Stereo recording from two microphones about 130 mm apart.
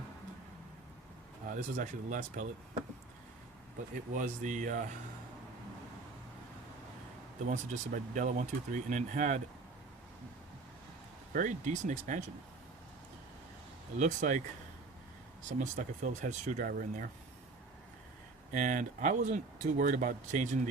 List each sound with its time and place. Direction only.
1.5 s speech: 80° right
4.1 s speech: 75° right (ahead or behind)
7.4 s speech: 70° right (ahead or behind)
11.3 s speech: 75° right (ahead or behind)
14.0 s speech: 75° right (ahead or behind)
15.5 s speech: 70° right (ahead or behind); by 17.1 s 85° right
18.5 s speech: 80° right